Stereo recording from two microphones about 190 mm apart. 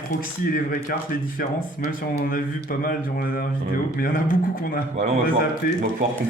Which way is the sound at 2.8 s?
50° left (ahead or behind).